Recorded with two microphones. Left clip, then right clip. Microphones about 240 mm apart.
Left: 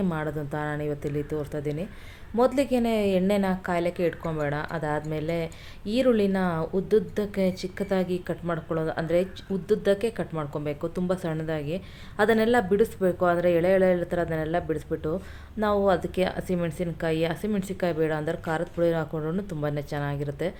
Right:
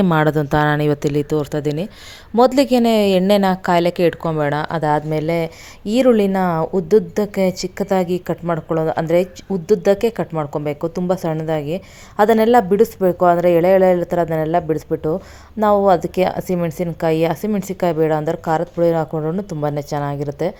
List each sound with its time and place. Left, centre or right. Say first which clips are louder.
0.0 s a woman's voice: right 14 dB; right